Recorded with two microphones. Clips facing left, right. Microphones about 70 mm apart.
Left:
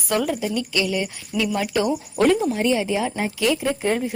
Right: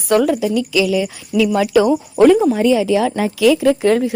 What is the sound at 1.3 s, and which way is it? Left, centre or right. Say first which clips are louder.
Speech: right 9 dB; right.